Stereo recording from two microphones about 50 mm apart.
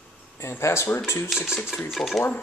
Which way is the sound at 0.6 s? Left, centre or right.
Left.